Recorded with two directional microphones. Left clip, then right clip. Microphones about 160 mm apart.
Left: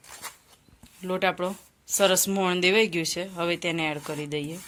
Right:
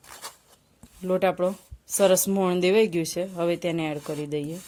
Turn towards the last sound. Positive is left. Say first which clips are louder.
# right 2 dB
turn(degrees=-40)  # may be behind; listen again after turning